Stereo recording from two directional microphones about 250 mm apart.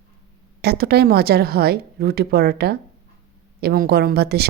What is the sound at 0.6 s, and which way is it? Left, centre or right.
Speech, right.